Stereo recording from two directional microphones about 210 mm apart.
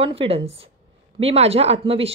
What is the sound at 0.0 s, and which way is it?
A woman's voice, 25° right (ahead or behind).